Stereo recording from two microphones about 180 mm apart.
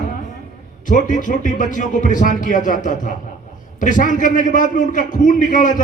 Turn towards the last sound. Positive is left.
turn(degrees=45)  # may be behind; listen again after turning